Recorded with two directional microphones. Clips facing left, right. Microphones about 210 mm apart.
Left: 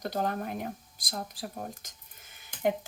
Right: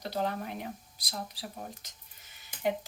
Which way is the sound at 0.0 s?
50° left (ahead or behind).